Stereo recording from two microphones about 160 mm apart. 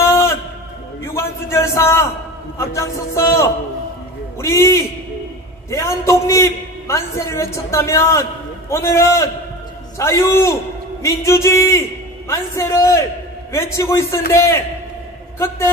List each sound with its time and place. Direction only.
0.0 s music: 15° left (ahead or behind)
1.1 s a sound: 15° left (ahead or behind)
2.6 s a man's voice: 15° left (ahead or behind)